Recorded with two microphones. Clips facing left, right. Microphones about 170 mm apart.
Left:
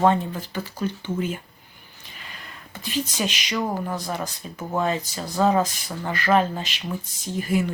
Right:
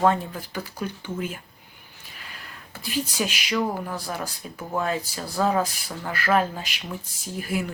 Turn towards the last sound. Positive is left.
turn(degrees=-10)  # may be behind; listen again after turning